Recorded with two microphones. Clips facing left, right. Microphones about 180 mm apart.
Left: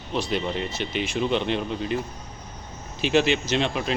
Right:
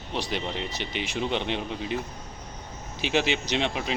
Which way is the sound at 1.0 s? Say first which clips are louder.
Left 4 dB; 15° right (ahead or behind).